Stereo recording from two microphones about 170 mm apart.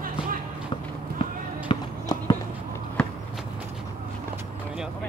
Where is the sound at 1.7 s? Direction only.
25° left (ahead or behind).